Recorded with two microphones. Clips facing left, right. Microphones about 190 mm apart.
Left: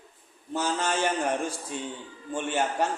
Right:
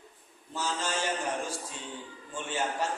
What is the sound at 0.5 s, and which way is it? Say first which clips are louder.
Speech: left 5 dB; 60° left (ahead or behind).